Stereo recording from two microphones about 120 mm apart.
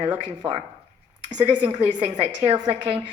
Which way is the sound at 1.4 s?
45° right (ahead or behind).